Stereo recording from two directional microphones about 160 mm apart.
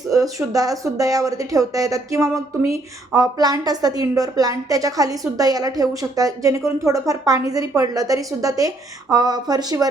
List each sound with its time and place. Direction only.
0.1 s a woman's voice: 20° right (ahead or behind)